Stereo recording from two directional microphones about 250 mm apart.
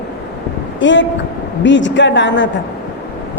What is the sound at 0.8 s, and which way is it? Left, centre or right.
A woman's voice, left.